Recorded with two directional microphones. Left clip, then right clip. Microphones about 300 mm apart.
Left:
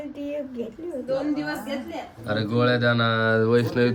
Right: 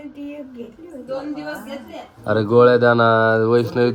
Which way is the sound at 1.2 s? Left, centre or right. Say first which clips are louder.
Left 1 dB; centre.